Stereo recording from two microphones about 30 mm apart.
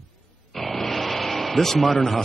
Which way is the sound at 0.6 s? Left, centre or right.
Centre.